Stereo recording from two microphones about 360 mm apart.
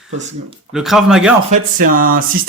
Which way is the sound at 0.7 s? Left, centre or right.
Centre.